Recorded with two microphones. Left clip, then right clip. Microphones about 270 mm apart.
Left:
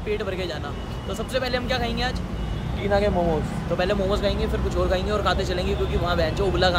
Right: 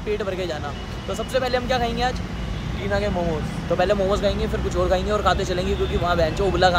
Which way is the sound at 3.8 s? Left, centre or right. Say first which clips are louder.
Right 3 dB; centre.